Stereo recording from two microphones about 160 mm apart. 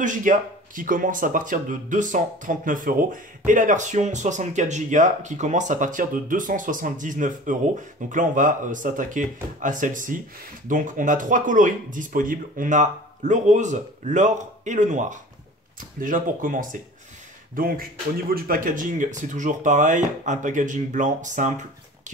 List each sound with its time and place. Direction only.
0.0 s speech: 55° right (ahead or behind)